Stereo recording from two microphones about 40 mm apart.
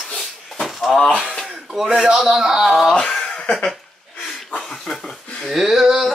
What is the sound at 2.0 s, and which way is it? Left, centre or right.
Speech, centre.